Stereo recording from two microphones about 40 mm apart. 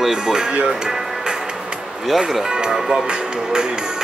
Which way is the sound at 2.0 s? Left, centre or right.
Centre.